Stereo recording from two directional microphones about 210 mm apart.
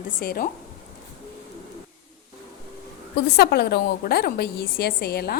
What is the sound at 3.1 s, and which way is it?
A woman's voice, 50° left (ahead or behind).